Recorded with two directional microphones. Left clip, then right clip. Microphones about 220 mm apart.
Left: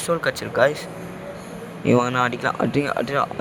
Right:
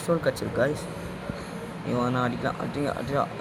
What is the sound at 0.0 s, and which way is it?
Speech, 40° left (ahead or behind).